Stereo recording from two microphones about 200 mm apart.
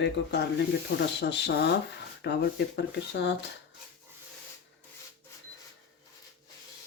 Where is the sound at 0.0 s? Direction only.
60° left (ahead or behind).